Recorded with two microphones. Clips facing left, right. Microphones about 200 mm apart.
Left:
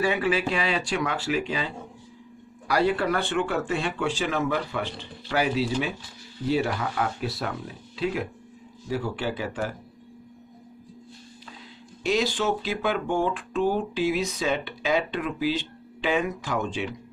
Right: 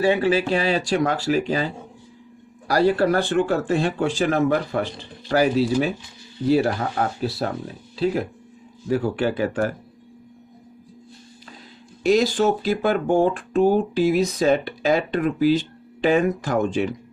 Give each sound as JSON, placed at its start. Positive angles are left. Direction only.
{"t": 0.0, "sound": "speech", "side_deg": -30}
{"t": 2.7, "sound": "speech", "side_deg": -40}
{"t": 8.8, "sound": "speech", "side_deg": -50}
{"t": 12.0, "sound": "speech", "side_deg": -40}